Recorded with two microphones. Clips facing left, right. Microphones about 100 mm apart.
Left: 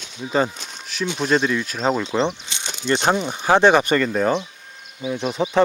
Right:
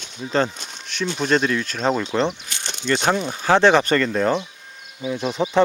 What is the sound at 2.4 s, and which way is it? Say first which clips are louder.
Speech: left 1 dB; 20° left (ahead or behind).